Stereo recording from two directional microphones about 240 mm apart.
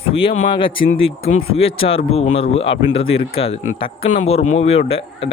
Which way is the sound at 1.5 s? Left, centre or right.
Left.